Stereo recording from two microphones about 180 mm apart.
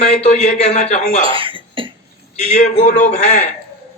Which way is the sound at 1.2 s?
30° right (ahead or behind).